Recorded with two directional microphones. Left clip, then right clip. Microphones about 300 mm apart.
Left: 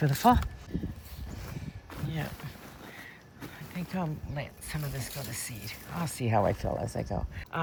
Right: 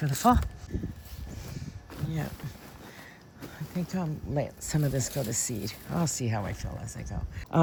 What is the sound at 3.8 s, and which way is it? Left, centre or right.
Speech, centre.